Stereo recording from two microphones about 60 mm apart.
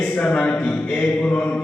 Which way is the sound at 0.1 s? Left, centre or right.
Left.